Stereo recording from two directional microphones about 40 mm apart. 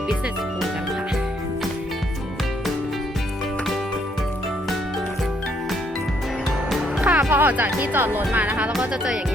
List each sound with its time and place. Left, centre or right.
7.0 s music: right
7.3 s music: right
7.5 s speech: right
7.9 s speech: right